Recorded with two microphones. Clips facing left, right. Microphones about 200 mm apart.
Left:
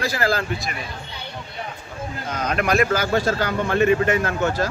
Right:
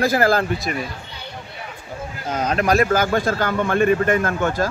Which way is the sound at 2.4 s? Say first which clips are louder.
Right 2 dB; 40° right (ahead or behind).